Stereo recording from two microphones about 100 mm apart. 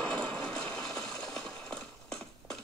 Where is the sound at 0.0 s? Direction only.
10° left (ahead or behind).